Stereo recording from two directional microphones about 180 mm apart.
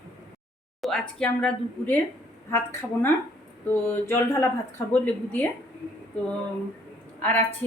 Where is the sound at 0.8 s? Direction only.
5° left (ahead or behind).